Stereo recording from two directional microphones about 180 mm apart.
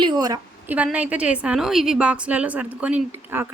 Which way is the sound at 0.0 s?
20° right (ahead or behind).